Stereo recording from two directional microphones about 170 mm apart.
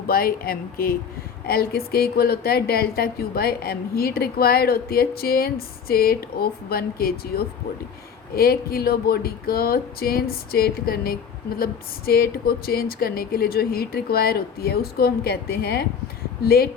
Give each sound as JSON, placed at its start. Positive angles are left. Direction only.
{"t": 0.1, "sound": "speech", "side_deg": 60}